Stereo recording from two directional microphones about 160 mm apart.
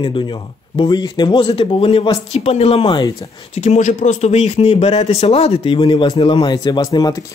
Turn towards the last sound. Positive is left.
turn(degrees=25)  # may be behind; listen again after turning